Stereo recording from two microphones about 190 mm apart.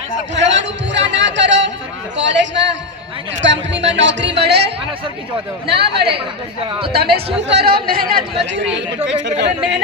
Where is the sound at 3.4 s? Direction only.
70° right (ahead or behind); by 8.2 s 50° right (ahead or behind).